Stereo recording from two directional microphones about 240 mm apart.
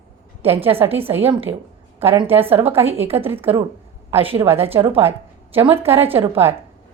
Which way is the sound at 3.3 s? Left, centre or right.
Centre.